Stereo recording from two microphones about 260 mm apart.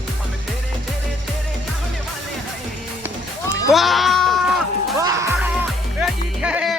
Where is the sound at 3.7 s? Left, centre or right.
Centre.